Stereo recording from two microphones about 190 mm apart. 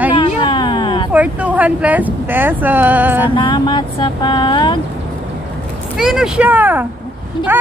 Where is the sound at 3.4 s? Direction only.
25° left (ahead or behind).